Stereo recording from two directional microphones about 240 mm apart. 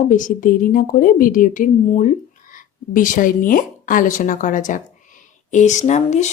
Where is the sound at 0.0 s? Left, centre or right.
Left.